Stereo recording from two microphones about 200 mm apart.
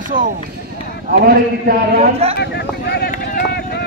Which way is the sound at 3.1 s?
50° left (ahead or behind).